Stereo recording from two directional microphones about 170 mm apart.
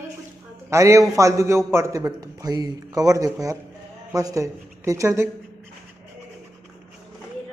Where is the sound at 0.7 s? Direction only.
15° right (ahead or behind).